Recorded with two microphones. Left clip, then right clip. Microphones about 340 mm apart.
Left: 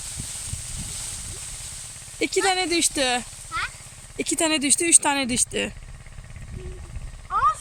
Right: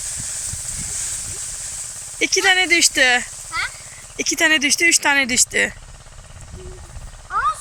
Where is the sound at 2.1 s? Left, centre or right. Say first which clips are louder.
Right 6 dB; centre.